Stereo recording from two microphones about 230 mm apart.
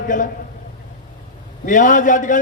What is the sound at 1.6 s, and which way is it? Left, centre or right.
Speech, left.